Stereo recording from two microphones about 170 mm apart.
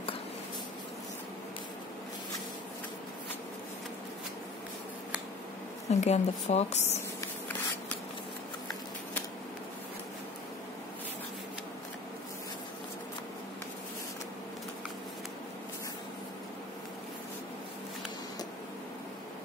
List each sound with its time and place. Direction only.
5.9 s speech: 40° left (ahead or behind)